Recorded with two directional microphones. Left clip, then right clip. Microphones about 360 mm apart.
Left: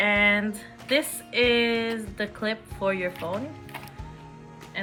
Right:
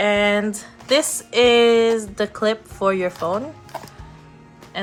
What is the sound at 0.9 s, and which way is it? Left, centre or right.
Speech, right.